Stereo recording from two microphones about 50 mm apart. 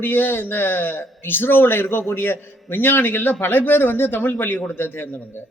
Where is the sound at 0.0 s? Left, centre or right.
Left.